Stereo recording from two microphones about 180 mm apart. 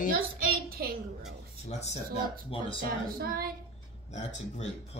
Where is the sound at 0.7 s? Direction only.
55° right (ahead or behind).